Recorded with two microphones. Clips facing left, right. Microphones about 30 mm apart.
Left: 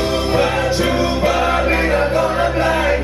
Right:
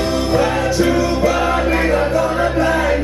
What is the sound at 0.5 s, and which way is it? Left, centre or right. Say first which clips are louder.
Music: right 1 dB; left.